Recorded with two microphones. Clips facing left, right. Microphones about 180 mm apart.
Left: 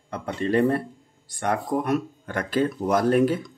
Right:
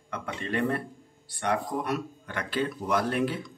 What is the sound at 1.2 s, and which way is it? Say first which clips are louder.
Speech: left 3 dB; 45° left (ahead or behind).